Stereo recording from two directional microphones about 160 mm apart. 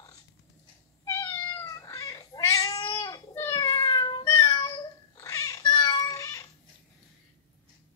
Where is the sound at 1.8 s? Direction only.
20° left (ahead or behind).